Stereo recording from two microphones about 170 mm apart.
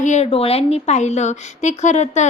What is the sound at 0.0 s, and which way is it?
Speech, 45° left (ahead or behind).